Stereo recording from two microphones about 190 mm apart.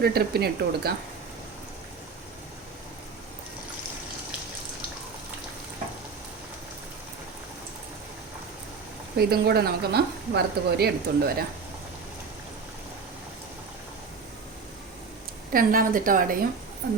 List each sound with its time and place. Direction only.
0.0 s speech: 55° right (ahead or behind)
9.1 s speech: 55° right (ahead or behind)
15.5 s a woman's voice: 50° right (ahead or behind)